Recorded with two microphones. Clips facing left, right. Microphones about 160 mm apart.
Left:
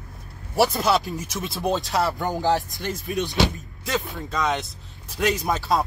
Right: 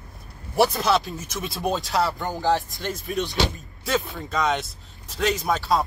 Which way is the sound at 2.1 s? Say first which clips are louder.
Left 1 dB; 20° left (ahead or behind).